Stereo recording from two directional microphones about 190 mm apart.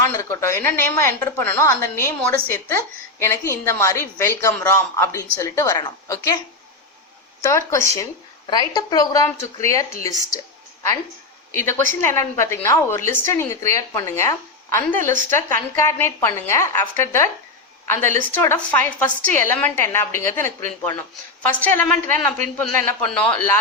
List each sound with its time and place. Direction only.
0.1 s a woman's voice: 15° left (ahead or behind)
7.4 s a woman's voice: 15° left (ahead or behind)
11.5 s a woman's voice: 15° left (ahead or behind)